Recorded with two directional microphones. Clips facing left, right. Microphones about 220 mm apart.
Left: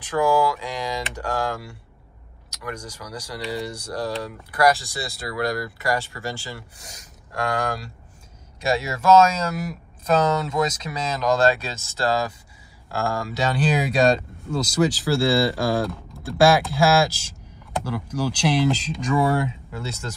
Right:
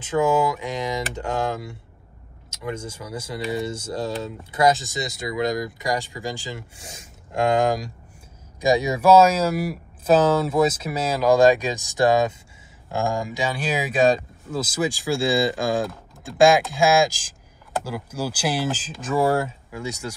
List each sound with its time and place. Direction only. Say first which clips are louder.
0.0 s speech: even; 20° right (ahead or behind)
6.8 s speech: right 3 dB; 30° right (ahead or behind); by 19.4 s 5° right (ahead or behind)
19.7 s speech: right 1 dB; 15° right (ahead or behind)